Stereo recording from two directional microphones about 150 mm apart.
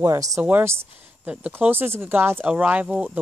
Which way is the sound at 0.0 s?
20° right (ahead or behind).